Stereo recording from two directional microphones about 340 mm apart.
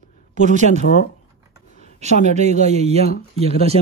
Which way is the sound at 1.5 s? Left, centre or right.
Left.